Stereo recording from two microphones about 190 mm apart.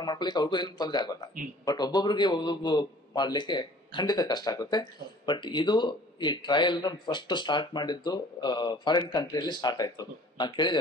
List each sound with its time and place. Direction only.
0.0 s a man's voice: 20° left (ahead or behind)